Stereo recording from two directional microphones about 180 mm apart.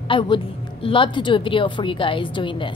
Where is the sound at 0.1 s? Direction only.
30° left (ahead or behind).